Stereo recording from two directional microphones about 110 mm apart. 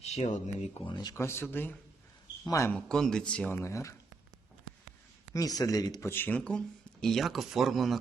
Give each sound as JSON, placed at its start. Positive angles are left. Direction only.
{"t": 0.0, "sound": "speech", "side_deg": 85}
{"t": 0.9, "sound": "speech", "side_deg": 40}
{"t": 1.1, "sound": "speech", "side_deg": 25}
{"t": 2.7, "sound": "speech", "side_deg": 5}
{"t": 3.5, "sound": "speech", "side_deg": 25}
{"t": 5.3, "sound": "speech", "side_deg": 35}